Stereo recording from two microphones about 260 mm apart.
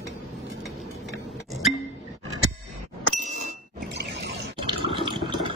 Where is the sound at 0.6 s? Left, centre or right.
Centre.